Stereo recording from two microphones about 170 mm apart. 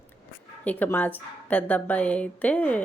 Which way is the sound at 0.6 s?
10° left (ahead or behind).